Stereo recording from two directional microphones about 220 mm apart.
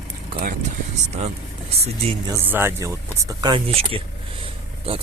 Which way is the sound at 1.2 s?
30° right (ahead or behind).